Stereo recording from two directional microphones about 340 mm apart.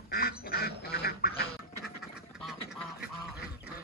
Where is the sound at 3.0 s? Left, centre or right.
Left.